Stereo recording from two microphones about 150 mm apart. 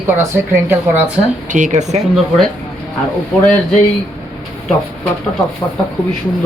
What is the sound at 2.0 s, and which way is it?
Speech, centre (ahead or behind).